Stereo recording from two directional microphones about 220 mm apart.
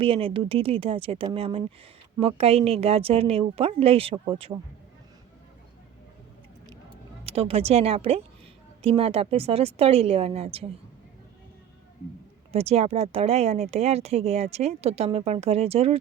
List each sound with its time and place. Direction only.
0.0 s speech: 25° right (ahead or behind)
7.3 s speech: 25° right (ahead or behind)
12.5 s speech: 30° right (ahead or behind)